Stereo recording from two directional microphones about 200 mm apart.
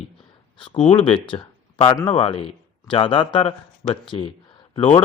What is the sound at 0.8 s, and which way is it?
A man's voice, 25° left (ahead or behind).